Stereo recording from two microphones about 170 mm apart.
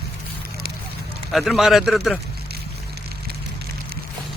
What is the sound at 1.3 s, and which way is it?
Speech, centre (ahead or behind).